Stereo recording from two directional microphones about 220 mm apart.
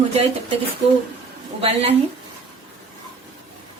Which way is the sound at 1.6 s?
25° right (ahead or behind).